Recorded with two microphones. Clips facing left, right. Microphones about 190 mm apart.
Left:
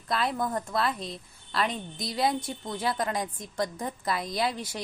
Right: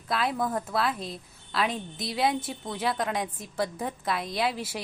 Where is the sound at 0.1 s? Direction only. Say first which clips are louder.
Right 1 dB; centre (ahead or behind).